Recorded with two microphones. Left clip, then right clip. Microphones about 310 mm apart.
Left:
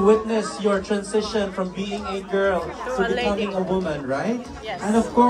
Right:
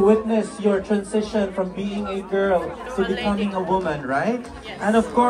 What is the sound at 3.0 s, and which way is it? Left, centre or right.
Speech, left.